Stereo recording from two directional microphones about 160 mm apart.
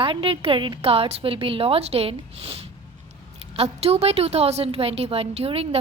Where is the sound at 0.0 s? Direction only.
35° right (ahead or behind).